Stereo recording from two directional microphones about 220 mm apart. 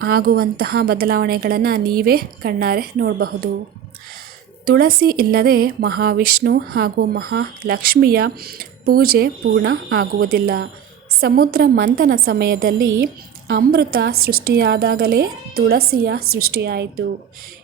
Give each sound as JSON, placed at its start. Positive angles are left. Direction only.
{"t": 0.0, "sound": "speech", "side_deg": -45}
{"t": 4.6, "sound": "speech", "side_deg": -45}